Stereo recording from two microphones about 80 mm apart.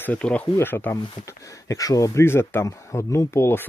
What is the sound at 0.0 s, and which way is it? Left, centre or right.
Speech, centre.